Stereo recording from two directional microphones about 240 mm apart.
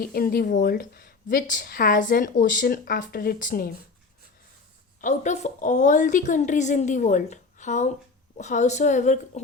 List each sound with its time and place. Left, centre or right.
0.0 s a woman's voice: left
4.9 s a woman's voice: left